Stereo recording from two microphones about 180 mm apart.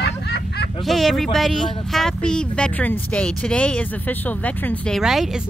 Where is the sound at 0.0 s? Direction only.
65° left (ahead or behind).